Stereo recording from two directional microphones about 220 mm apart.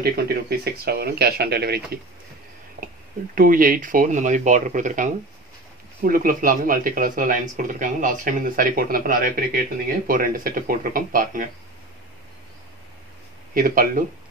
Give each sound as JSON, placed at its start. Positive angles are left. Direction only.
{"t": 0.0, "sound": "speech", "side_deg": -45}
{"t": 3.3, "sound": "speech", "side_deg": -40}
{"t": 13.6, "sound": "speech", "side_deg": -40}